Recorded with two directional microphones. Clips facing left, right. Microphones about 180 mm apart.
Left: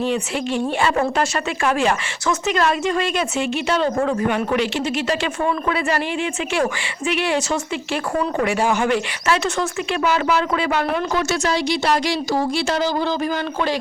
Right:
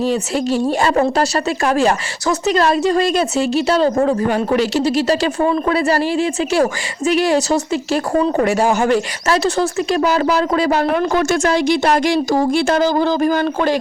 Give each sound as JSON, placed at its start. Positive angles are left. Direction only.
{"t": 0.0, "sound": "a woman's voice", "side_deg": -40}
{"t": 10.9, "sound": "speech", "side_deg": -50}